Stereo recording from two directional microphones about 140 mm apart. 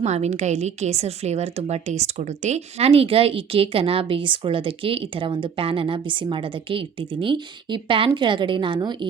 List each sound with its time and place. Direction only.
0.0 s a woman's voice: 55° right (ahead or behind); by 9.0 s 35° right (ahead or behind)